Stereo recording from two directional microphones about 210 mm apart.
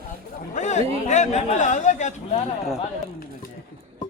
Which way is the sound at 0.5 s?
35° left (ahead or behind).